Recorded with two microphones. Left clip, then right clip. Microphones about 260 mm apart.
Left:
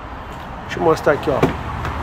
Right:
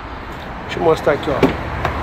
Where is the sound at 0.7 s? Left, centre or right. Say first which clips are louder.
Right 1 dB; centre.